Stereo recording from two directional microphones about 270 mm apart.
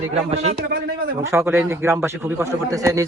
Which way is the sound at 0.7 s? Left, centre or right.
Right.